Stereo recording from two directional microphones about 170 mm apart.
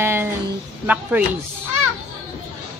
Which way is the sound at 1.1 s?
10° right (ahead or behind).